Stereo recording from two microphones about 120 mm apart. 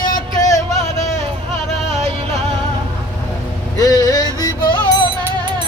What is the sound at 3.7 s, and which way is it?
Music, 30° left (ahead or behind).